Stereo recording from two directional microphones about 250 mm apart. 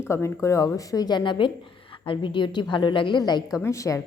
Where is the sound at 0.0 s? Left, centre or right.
Centre.